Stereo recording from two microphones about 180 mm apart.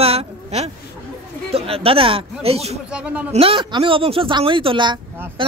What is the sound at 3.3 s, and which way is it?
Speech, 30° right (ahead or behind).